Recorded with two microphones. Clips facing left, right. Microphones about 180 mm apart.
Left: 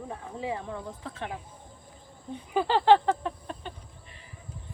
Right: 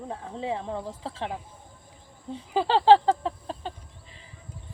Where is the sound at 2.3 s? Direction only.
25° right (ahead or behind).